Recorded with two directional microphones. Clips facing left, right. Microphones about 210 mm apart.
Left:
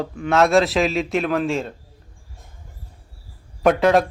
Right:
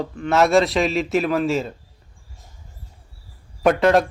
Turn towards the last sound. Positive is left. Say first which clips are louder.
# even
turn(degrees=0)  # may be behind; listen again after turning